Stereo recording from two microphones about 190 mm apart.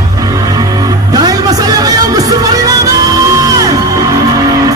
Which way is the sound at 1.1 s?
20° right (ahead or behind).